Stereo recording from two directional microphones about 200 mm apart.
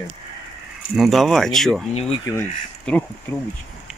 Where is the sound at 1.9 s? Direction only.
30° left (ahead or behind).